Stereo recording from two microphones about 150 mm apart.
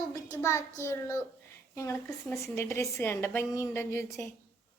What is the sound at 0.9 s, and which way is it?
A child's voice, 20° left (ahead or behind).